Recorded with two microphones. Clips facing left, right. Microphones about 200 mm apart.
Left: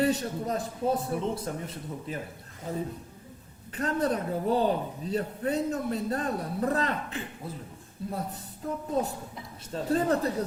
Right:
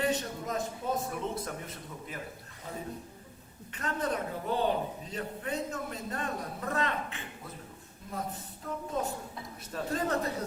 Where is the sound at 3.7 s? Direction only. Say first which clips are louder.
Left 5 dB; 35° left (ahead or behind).